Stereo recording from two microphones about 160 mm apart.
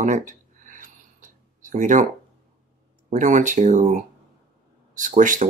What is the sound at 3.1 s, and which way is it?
Speech, 50° right (ahead or behind).